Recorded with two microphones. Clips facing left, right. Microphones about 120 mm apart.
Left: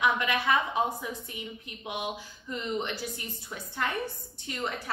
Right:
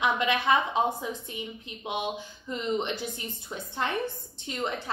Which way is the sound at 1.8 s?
25° right (ahead or behind).